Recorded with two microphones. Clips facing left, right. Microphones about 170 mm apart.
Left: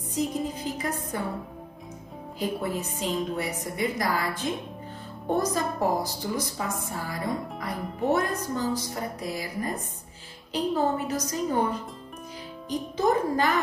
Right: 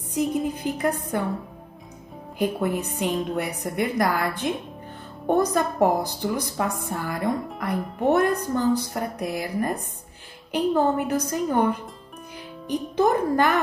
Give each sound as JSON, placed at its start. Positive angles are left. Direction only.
{"t": 0.1, "sound": "a woman's voice", "side_deg": -60}
{"t": 2.3, "sound": "a woman's voice", "side_deg": -60}
{"t": 12.6, "sound": "a woman's voice", "side_deg": -60}